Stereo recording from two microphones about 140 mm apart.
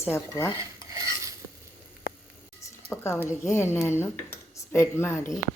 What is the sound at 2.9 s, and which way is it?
Speech, 15° left (ahead or behind).